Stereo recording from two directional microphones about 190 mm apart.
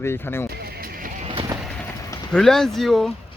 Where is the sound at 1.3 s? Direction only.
25° right (ahead or behind).